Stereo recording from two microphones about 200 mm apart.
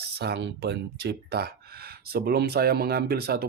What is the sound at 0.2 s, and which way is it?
Speech, 60° right (ahead or behind).